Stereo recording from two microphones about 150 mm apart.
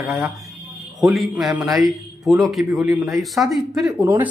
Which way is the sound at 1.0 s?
Centre (ahead or behind).